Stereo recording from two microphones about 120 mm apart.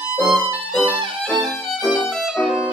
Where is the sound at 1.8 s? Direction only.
20° left (ahead or behind).